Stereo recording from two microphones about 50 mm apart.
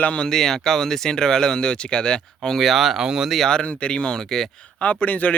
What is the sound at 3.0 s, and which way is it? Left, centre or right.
Speech, centre.